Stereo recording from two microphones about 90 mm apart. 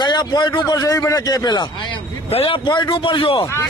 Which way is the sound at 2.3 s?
90° left.